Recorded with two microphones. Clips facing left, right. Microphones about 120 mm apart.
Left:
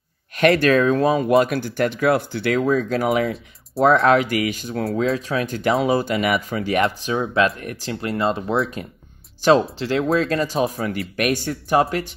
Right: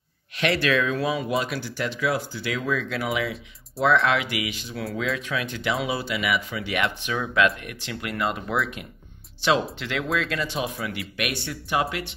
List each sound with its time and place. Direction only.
0.4 s speech: 45° left (ahead or behind)
2.6 s speech: 40° left (ahead or behind)
4.8 s speech: 30° left (ahead or behind)